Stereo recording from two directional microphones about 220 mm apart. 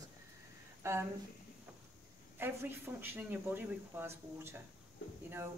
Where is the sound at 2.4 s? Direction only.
10° right (ahead or behind).